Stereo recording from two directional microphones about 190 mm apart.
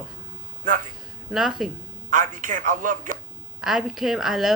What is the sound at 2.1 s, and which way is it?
A man's voice, 45° right (ahead or behind).